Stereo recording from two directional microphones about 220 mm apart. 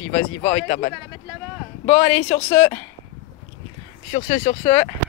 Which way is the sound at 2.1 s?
5° left (ahead or behind).